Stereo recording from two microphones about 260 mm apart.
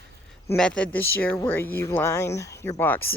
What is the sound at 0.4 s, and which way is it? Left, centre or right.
A woman's voice, centre.